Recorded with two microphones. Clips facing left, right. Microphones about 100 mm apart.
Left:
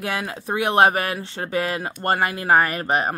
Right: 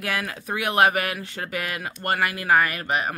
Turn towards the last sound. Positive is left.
turn(degrees=35)  # may be behind; listen again after turning